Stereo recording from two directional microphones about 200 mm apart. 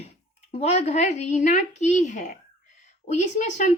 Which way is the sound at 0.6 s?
35° left (ahead or behind).